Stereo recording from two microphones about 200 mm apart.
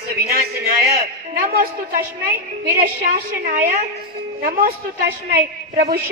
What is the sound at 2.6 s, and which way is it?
A woman's voice, 50° right (ahead or behind).